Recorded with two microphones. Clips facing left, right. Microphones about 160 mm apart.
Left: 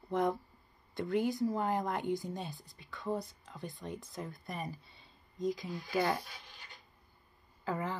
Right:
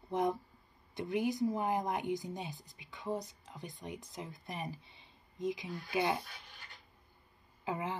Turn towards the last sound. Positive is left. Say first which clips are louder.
# left 1 dB
turn(degrees=-20)  # may be behind; listen again after turning